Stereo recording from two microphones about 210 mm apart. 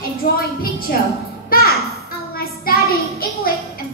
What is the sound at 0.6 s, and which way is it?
Speech, 45° left (ahead or behind).